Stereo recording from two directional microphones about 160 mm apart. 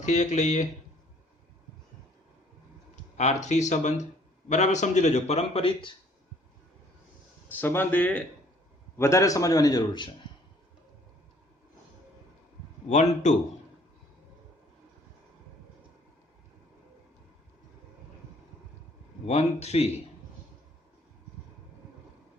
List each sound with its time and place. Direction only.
0.0 s a man's voice: 45° left (ahead or behind)
2.9 s a sound: 45° left (ahead or behind)
3.4 s a man's voice: 45° left (ahead or behind)
7.4 s a man's voice: 10° left (ahead or behind); by 10.2 s 30° left (ahead or behind)
12.9 s a man's voice: 45° left (ahead or behind)
19.2 s speech: 40° left (ahead or behind)